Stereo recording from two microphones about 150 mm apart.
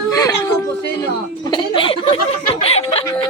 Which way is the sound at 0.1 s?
20° left (ahead or behind).